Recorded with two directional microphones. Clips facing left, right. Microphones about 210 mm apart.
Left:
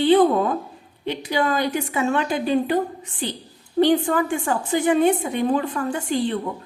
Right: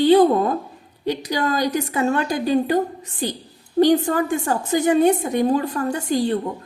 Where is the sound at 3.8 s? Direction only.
40° right (ahead or behind).